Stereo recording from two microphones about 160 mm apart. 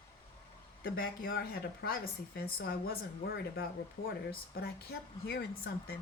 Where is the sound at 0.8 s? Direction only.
70° left (ahead or behind).